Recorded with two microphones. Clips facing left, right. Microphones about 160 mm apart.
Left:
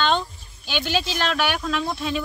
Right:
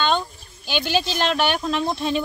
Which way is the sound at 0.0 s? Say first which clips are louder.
Even; 5° right (ahead or behind).